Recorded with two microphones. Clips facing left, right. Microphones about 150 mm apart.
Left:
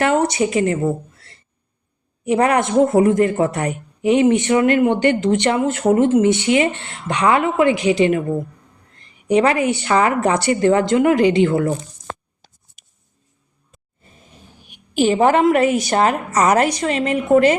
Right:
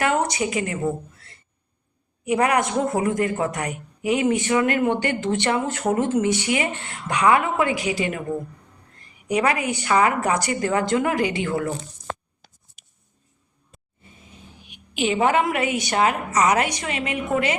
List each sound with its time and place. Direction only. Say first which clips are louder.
0.0 s speech: left 5 dB; 25° left (ahead or behind)
2.2 s a man's voice: left 4 dB; 30° left (ahead or behind)
9.2 s a man's voice: left 6 dB; 30° left (ahead or behind)
14.9 s a woman's voice: left 6 dB; 40° left (ahead or behind)